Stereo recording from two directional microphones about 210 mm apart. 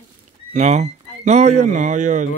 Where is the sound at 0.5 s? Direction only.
35° right (ahead or behind).